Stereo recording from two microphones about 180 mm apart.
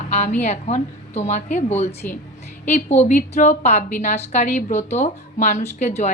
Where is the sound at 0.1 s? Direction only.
40° left (ahead or behind).